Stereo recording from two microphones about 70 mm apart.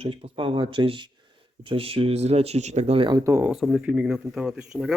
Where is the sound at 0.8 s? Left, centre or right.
Right.